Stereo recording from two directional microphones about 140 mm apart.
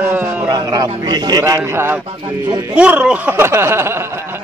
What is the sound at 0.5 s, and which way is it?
A man's voice, 25° right (ahead or behind).